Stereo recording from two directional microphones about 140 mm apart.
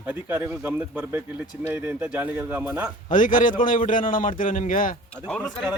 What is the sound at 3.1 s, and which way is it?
A man's voice, 70° left (ahead or behind).